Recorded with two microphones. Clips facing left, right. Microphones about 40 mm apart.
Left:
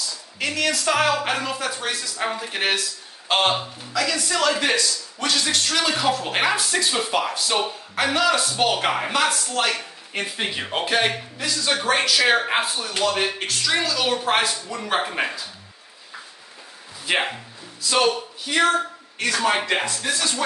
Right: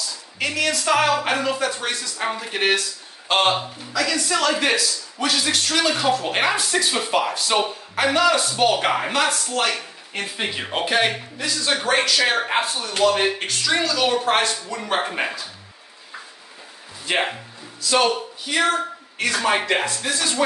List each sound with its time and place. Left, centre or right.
0.4 s speech: centre
17.0 s speech: centre